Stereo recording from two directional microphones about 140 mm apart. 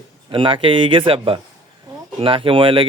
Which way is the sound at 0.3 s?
35° right (ahead or behind).